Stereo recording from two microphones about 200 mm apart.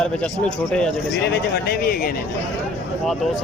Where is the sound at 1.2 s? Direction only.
55° left (ahead or behind).